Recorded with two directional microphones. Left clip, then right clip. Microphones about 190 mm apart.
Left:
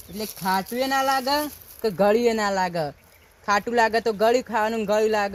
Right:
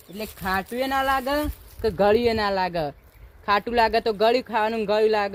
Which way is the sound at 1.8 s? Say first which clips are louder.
Even; 25° right (ahead or behind).